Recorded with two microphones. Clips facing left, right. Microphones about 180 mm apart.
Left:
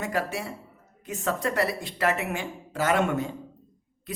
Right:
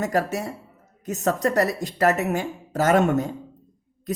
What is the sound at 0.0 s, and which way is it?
Speech, 40° right (ahead or behind).